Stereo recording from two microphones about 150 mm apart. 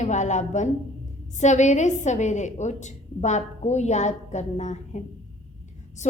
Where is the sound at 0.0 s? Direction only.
50° left (ahead or behind).